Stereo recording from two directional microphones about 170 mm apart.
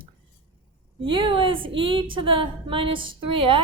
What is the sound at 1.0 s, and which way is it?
A woman's voice, 30° right (ahead or behind).